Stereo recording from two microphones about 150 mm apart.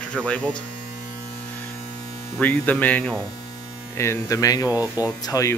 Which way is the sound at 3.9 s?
20° left (ahead or behind).